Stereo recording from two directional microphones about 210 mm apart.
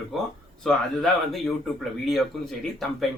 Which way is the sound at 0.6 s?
Centre (ahead or behind).